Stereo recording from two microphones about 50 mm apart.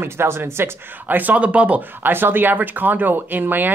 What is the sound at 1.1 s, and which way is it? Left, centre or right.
Speech, right.